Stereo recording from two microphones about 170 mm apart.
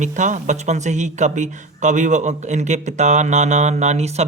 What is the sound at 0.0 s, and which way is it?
Speech, 45° right (ahead or behind).